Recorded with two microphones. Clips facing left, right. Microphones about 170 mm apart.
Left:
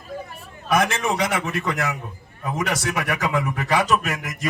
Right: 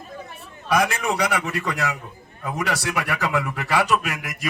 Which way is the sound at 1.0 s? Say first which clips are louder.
Even; 20° left (ahead or behind).